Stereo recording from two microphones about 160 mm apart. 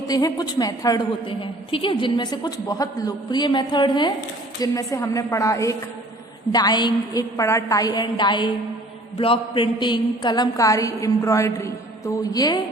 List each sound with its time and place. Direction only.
0.1 s a woman's voice: 25° left (ahead or behind)